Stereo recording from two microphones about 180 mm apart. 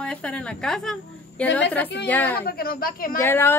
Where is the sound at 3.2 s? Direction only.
10° left (ahead or behind).